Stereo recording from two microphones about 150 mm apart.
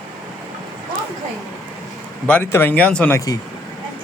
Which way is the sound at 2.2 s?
15° left (ahead or behind).